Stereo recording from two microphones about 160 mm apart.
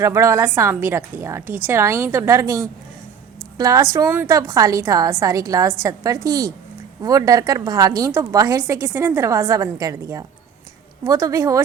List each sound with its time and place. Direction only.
0.0 s a woman's voice: 15° right (ahead or behind)